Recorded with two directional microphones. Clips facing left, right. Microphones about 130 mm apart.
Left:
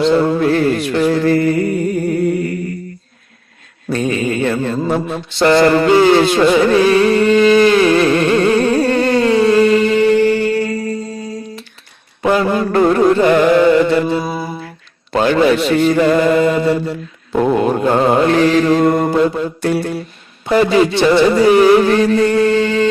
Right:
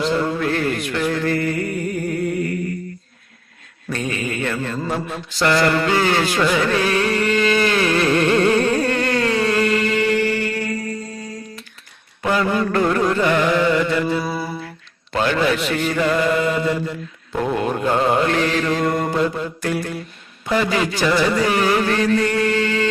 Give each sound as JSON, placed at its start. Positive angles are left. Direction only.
{"t": 0.0, "sound": "mantra", "side_deg": 30}
{"t": 0.3, "sound": "a sound", "side_deg": 30}
{"t": 3.8, "sound": "mantra", "side_deg": 30}
{"t": 12.2, "sound": "music", "side_deg": 30}
{"t": 15.1, "sound": "mantra", "side_deg": 35}
{"t": 20.4, "sound": "a sound", "side_deg": 30}